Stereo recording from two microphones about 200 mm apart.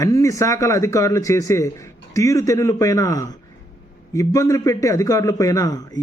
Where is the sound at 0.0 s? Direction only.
15° left (ahead or behind).